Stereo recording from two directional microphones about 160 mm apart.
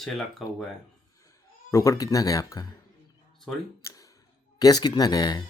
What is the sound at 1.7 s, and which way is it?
Speech, 20° left (ahead or behind).